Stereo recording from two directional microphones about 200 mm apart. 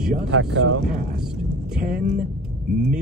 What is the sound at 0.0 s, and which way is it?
Speech, 5° right (ahead or behind).